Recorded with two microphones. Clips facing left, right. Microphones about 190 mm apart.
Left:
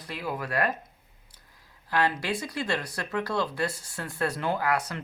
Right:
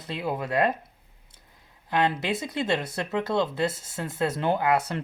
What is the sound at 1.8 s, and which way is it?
Speech, 20° right (ahead or behind).